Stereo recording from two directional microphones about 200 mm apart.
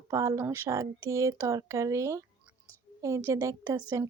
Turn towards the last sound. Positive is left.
turn(degrees=-15)  # may be behind; listen again after turning